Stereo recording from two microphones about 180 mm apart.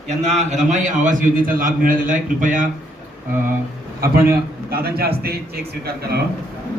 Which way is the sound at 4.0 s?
60° right (ahead or behind).